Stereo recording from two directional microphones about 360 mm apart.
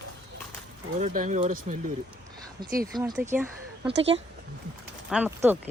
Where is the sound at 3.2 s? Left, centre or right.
Centre.